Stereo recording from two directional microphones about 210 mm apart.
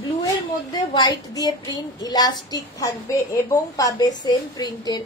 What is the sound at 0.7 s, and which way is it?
A child's voice, 20° left (ahead or behind).